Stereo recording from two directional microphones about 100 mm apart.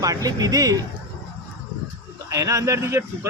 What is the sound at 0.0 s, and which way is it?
Speech, 35° right (ahead or behind).